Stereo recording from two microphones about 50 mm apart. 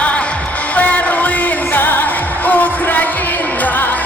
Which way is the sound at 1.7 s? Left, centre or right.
Left.